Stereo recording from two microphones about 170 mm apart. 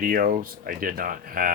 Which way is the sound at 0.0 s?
55° right (ahead or behind).